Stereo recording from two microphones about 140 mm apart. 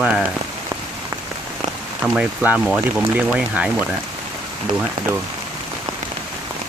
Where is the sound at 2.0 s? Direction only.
5° right (ahead or behind).